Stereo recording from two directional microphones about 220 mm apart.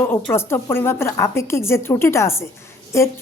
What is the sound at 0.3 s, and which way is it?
A woman's voice, 10° left (ahead or behind).